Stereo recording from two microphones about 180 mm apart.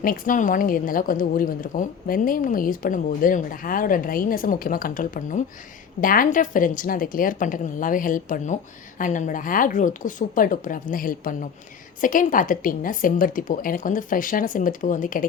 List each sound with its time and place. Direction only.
0.0 s a woman's voice: 50° left (ahead or behind)